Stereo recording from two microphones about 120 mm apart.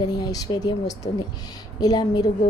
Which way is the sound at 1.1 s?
90° left.